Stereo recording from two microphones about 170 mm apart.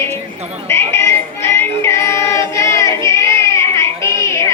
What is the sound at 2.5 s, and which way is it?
Child singing, 15° left (ahead or behind).